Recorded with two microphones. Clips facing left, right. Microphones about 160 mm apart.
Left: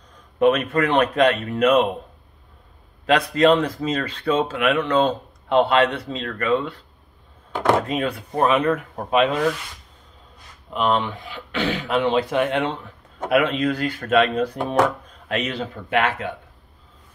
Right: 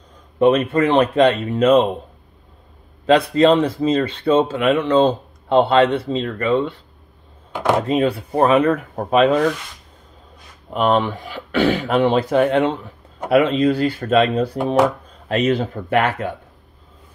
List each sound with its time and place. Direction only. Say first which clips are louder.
0.4 s speech: right 3 dB; 30° right (ahead or behind)
3.1 s speech: right 3 dB; 30° right (ahead or behind)
7.9 s speech: right 6 dB; 30° right (ahead or behind)
10.7 s speech: right 4 dB; 45° right (ahead or behind)